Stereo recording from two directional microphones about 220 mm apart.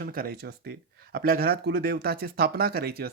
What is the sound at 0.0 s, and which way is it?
Speech, 40° right (ahead or behind).